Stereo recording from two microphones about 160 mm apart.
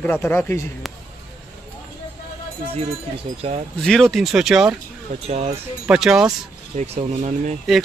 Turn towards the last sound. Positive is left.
turn(degrees=-45)  # may be behind; listen again after turning